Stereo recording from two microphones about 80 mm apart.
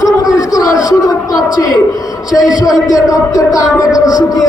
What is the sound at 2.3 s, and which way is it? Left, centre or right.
Speech, left.